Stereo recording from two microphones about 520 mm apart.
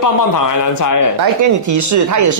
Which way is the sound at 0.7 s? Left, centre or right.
Left.